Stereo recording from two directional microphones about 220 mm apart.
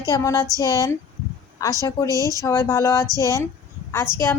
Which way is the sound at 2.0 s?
15° right (ahead or behind).